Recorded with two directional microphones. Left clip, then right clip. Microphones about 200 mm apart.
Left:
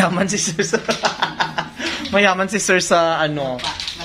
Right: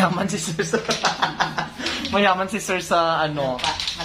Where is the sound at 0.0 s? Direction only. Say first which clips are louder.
Left 4 dB; 35° left (ahead or behind).